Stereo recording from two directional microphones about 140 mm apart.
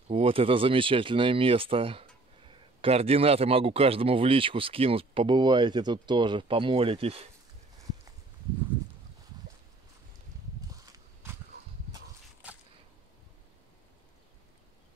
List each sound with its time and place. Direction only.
0.1 s speech: 40° right (ahead or behind)